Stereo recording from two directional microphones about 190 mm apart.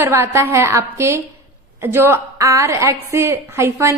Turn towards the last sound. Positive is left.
turn(degrees=-15)  # may be behind; listen again after turning